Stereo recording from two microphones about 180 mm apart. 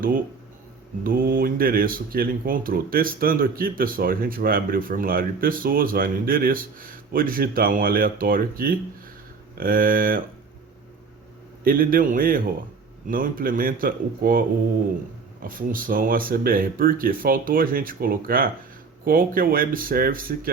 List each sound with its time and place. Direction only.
1.0 s speech: 55° right (ahead or behind)
11.6 s speech: 50° right (ahead or behind)